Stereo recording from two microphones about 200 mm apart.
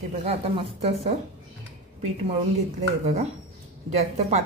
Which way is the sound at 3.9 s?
35° right (ahead or behind).